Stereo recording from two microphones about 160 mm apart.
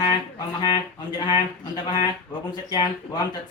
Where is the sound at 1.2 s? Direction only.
25° left (ahead or behind).